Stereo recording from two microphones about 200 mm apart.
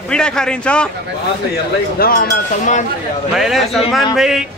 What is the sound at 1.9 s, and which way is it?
Speech, 45° left (ahead or behind).